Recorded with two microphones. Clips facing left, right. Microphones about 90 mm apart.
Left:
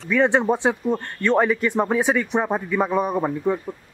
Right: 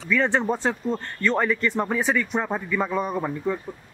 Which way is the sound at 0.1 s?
15° left (ahead or behind).